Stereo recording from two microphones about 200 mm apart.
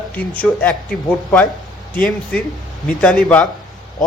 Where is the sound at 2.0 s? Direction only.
5° left (ahead or behind).